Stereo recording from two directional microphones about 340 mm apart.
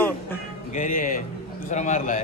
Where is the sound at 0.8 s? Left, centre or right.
Left.